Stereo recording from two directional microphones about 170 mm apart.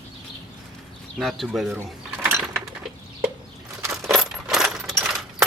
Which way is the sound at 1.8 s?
10° right (ahead or behind).